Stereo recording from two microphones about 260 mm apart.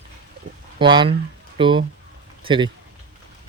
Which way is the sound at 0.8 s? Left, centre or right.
Centre.